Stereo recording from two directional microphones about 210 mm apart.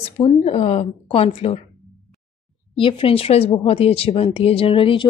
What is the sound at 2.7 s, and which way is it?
Speech, 25° left (ahead or behind).